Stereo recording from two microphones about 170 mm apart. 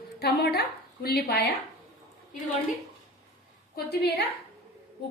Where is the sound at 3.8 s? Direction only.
70° left (ahead or behind).